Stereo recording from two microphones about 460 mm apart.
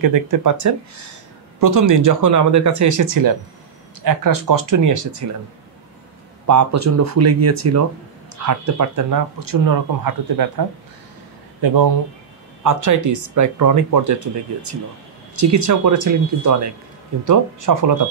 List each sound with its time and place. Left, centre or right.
0.0 s speech: right
6.4 s speech: right